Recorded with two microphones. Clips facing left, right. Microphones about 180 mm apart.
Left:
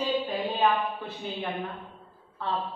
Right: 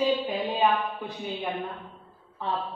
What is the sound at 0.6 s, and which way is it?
A man's voice, 15° right (ahead or behind).